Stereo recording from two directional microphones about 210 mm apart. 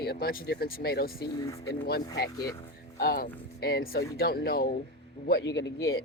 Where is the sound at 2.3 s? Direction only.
15° left (ahead or behind).